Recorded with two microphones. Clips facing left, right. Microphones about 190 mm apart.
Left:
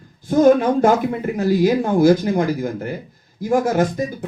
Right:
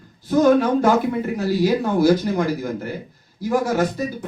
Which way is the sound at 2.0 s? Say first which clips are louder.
Left 3 dB; 50° left (ahead or behind).